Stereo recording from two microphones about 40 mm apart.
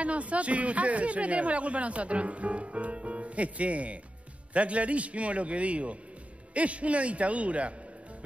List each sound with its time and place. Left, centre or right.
0.0 s speech: right